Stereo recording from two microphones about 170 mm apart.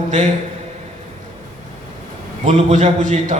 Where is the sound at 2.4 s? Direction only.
40° right (ahead or behind).